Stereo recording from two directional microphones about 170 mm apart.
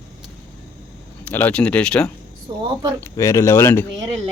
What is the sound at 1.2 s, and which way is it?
Speech, 10° left (ahead or behind).